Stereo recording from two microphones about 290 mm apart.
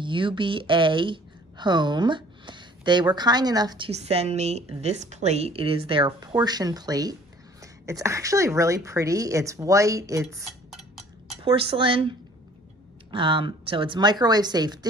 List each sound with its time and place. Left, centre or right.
0.0 s speech: centre
11.4 s speech: centre